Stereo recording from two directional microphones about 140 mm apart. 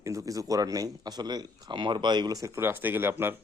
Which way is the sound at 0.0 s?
25° right (ahead or behind).